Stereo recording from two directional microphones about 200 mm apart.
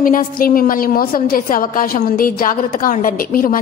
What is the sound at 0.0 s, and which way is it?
A woman's voice, 45° left (ahead or behind).